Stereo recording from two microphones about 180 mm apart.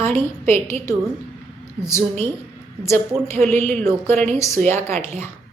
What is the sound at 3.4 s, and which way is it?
Speech, 40° right (ahead or behind).